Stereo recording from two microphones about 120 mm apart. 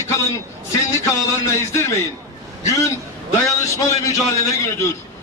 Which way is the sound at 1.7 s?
25° left (ahead or behind).